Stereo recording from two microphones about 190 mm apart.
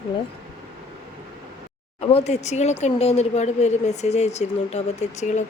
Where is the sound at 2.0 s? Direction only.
30° left (ahead or behind).